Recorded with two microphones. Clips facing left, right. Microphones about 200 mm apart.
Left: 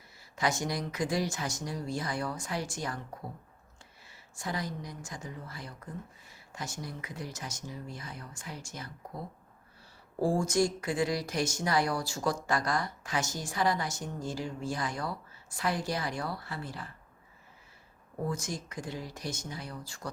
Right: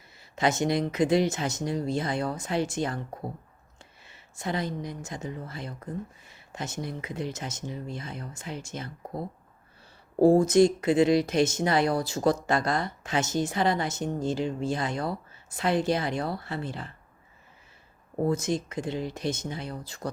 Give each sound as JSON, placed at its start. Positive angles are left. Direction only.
{"t": 0.2, "sound": "speech", "side_deg": -25}
{"t": 10.2, "sound": "speech", "side_deg": -60}
{"t": 10.4, "sound": "speech", "side_deg": -20}
{"t": 18.3, "sound": "speech", "side_deg": -20}